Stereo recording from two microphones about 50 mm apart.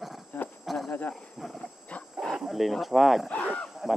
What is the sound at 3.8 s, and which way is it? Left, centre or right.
Honk, centre.